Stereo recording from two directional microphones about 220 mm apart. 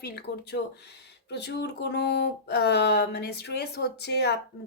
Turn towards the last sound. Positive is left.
turn(degrees=50)  # may be behind; listen again after turning